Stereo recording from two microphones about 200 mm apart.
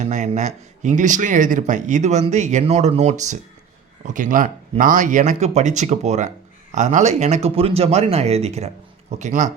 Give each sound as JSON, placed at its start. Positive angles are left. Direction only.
{"t": 0.0, "sound": "speech", "side_deg": -35}